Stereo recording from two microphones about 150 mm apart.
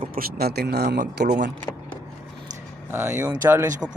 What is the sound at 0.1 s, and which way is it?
Speech, 85° right.